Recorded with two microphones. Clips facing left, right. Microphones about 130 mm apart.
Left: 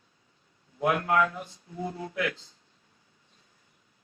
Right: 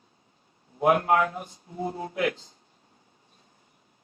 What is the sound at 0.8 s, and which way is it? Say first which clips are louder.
A man's voice: right 3 dB; 30° right (ahead or behind).